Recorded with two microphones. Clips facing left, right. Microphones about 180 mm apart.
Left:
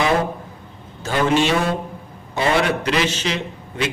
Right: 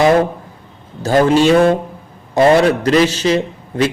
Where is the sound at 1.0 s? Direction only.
40° right (ahead or behind).